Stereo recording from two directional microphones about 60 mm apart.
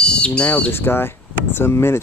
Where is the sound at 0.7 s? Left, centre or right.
Left.